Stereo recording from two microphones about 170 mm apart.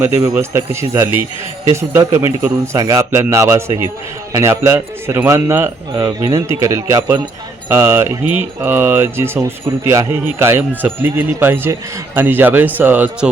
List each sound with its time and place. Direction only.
0.0 s speech: 15° right (ahead or behind)